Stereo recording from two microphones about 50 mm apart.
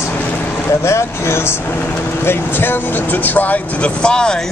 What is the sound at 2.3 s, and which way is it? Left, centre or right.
Speech, left.